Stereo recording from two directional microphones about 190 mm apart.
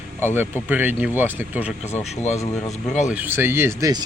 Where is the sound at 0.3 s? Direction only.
10° right (ahead or behind).